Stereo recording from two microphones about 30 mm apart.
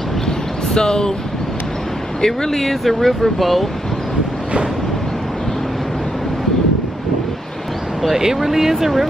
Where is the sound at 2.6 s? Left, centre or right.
Centre.